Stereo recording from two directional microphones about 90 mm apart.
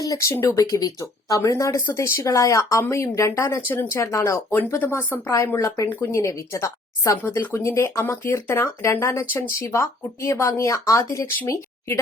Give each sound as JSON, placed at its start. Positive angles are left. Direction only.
{"t": 0.0, "sound": "speech", "side_deg": 35}
{"t": 0.5, "sound": "speech", "side_deg": 45}